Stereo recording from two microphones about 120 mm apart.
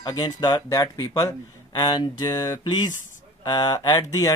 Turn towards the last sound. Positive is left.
turn(degrees=25)  # may be behind; listen again after turning